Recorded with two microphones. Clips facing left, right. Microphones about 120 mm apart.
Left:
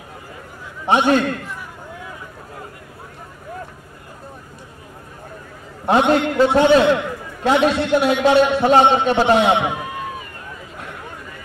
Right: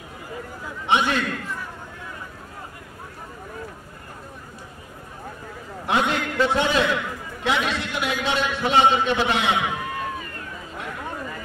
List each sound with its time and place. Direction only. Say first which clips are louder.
0.8 s a man's voice: left 6 dB; 40° left (ahead or behind)
5.9 s a man's voice: left 8 dB; 35° left (ahead or behind)